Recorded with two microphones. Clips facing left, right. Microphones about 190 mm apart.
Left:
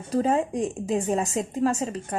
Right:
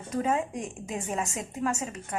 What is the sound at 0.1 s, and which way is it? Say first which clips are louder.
A woman's voice: left 5 dB; 35° left (ahead or behind).